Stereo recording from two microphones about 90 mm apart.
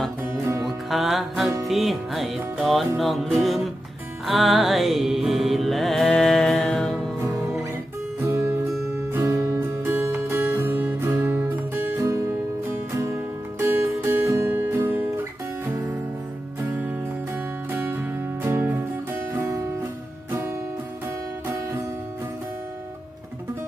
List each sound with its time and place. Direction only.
0.9 s music: centre (ahead or behind)
8.3 s music: 30° right (ahead or behind)
11.9 s music: 35° right (ahead or behind)
14.5 s guitar: 25° right (ahead or behind)
16.6 s music: 20° right (ahead or behind)